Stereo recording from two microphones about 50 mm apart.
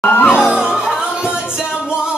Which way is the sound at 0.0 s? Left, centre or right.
Left.